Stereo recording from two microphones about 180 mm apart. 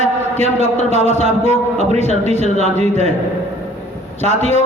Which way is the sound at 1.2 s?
40° right (ahead or behind).